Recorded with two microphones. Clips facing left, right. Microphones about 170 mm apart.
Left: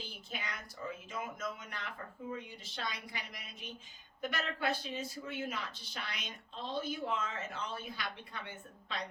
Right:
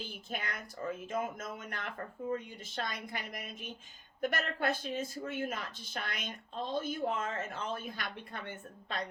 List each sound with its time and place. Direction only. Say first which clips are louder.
0.3 s speech: right 4 dB; 50° right (ahead or behind)